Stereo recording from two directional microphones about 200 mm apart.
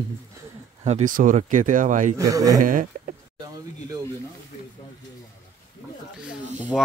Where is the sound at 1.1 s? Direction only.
40° right (ahead or behind).